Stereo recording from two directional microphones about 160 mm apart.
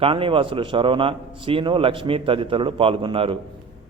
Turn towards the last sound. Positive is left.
turn(degrees=-35)  # may be behind; listen again after turning